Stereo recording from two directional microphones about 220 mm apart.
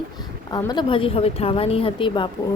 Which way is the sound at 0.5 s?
20° left (ahead or behind).